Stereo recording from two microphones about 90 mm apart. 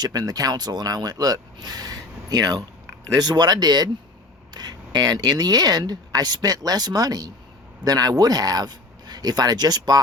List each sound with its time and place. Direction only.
0.0 s speech: 45° right (ahead or behind)